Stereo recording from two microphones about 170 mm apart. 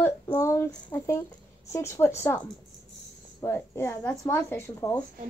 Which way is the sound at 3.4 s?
15° left (ahead or behind).